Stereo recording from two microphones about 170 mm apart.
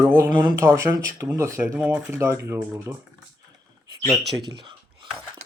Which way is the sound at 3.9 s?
25° right (ahead or behind).